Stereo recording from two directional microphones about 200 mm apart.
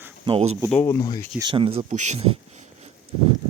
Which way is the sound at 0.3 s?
30° right (ahead or behind).